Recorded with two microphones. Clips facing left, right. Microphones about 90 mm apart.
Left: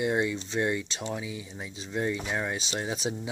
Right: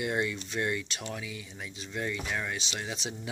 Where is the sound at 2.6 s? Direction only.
35° left (ahead or behind).